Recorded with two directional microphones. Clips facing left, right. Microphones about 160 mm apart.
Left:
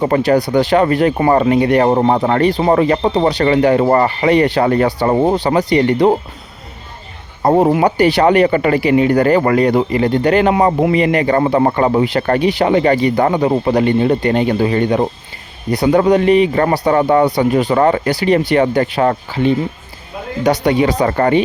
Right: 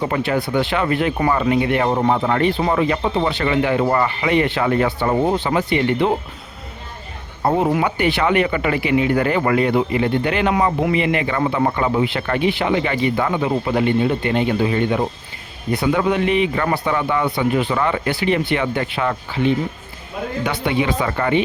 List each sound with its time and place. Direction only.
0.0 s speech: 40° left (ahead or behind)
7.4 s speech: 40° left (ahead or behind)